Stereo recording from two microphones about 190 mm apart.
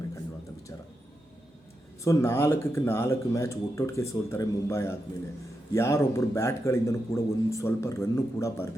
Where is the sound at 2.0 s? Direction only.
15° left (ahead or behind).